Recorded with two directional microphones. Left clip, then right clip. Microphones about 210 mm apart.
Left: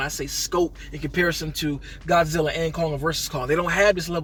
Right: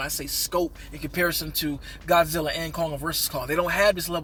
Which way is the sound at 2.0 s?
20° right (ahead or behind).